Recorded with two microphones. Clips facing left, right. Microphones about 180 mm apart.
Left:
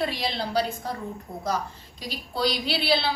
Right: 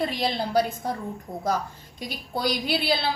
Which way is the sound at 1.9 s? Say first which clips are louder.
Left 1 dB; 50° right (ahead or behind).